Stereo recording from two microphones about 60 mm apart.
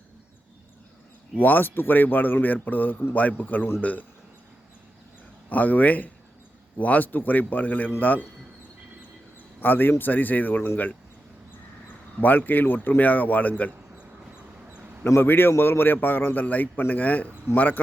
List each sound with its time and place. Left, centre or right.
1.4 s a man's voice: left
5.5 s speech: left
9.6 s a man's voice: left
12.2 s speech: left
14.7 s a sound: right
15.0 s a man's voice: left